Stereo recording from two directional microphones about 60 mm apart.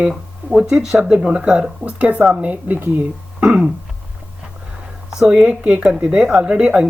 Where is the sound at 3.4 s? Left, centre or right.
Centre.